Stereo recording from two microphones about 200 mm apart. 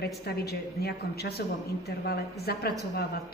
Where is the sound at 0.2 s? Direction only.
55° left (ahead or behind).